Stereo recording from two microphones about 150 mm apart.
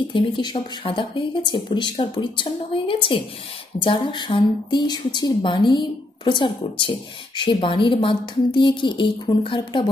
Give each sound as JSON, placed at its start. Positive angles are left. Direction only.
{"t": 0.1, "sound": "speech", "side_deg": 30}